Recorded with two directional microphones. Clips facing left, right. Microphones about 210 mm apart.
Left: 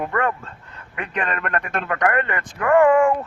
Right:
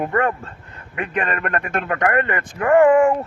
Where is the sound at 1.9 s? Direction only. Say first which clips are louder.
Right 1 dB; 30° right (ahead or behind).